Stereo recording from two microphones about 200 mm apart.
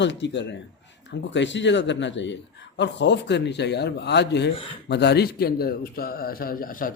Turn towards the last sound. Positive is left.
turn(degrees=45)  # may be behind; listen again after turning